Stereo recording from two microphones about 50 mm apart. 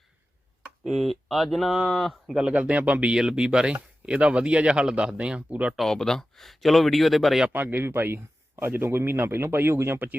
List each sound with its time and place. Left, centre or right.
0.9 s speech: centre
2.3 s speech: right
3.2 s speech: centre
5.7 s speech: centre
7.5 s speech: right